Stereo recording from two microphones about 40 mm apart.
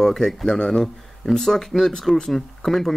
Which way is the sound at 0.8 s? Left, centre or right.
Centre.